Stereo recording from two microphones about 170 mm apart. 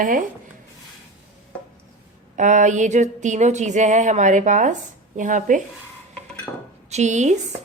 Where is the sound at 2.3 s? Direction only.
45° right (ahead or behind).